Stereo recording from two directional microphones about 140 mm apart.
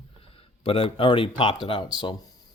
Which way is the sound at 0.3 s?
40° left (ahead or behind).